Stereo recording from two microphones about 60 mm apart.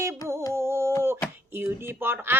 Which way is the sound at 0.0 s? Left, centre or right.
Right.